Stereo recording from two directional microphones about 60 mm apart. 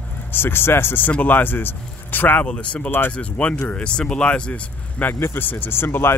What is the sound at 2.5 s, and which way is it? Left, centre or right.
Speech, left.